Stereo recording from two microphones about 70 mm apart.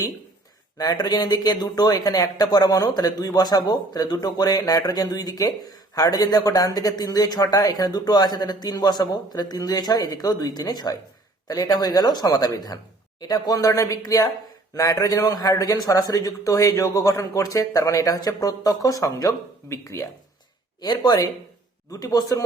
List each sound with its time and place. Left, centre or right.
0.8 s speech: left
11.4 s a man's voice: left
13.6 s a man's voice: left
19.6 s speech: left
20.8 s speech: left
21.8 s a man's voice: left